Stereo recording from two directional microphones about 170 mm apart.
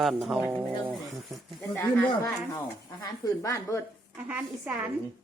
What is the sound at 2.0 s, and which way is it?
Speech, 15° left (ahead or behind).